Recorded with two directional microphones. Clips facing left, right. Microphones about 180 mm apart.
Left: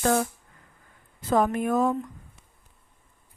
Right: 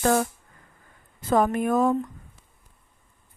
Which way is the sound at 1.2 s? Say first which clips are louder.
Right 1 dB; 50° right (ahead or behind).